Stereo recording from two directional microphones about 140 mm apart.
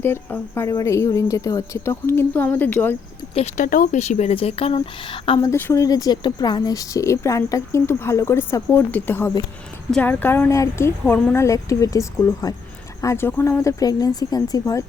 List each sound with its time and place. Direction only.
0.0 s a woman's voice: 15° left (ahead or behind)
3.6 s a woman's voice: 75° left (ahead or behind); by 5.4 s 40° left (ahead or behind)
5.4 s a woman's voice: 15° left (ahead or behind)